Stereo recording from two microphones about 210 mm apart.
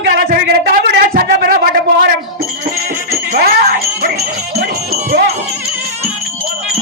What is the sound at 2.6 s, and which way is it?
Music, 45° right (ahead or behind).